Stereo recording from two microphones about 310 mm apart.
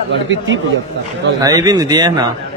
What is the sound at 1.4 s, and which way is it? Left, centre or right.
Speech, centre.